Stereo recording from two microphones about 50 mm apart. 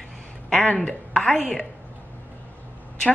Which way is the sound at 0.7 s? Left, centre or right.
Centre.